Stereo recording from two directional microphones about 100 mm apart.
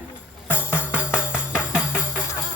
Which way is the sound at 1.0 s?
15° right (ahead or behind).